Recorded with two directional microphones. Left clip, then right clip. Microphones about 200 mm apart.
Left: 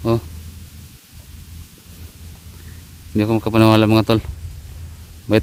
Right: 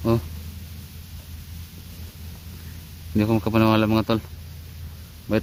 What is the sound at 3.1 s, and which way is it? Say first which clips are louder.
Speech: left 5 dB; 45° left (ahead or behind).